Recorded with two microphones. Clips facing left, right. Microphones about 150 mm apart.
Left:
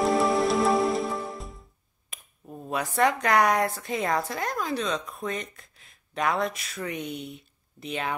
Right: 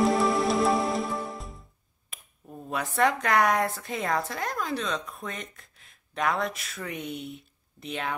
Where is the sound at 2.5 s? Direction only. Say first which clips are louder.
Left 2 dB; centre (ahead or behind).